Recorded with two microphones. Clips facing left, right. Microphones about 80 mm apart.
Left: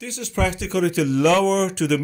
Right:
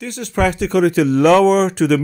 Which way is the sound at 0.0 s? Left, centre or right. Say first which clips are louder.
Right 6 dB; right.